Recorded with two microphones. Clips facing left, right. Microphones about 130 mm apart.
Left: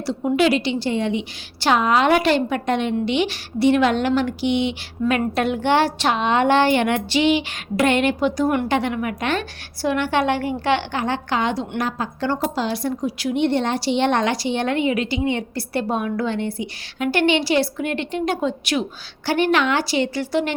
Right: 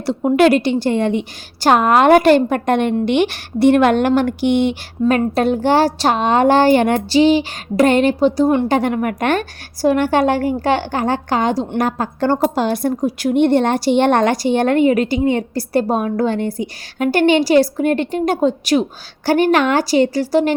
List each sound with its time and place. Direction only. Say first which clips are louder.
0.0 s a woman's voice: right 6 dB; 55° right (ahead or behind); by 8.7 s 30° right (ahead or behind)
8.7 s a woman's voice: right 5 dB; 45° right (ahead or behind)